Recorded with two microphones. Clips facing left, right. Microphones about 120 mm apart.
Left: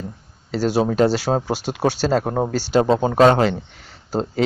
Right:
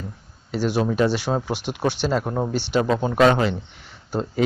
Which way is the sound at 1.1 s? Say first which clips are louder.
Left 3 dB; 90° left.